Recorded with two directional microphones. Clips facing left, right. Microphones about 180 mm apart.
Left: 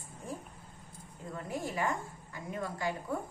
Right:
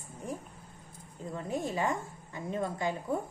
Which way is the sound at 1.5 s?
25° right (ahead or behind).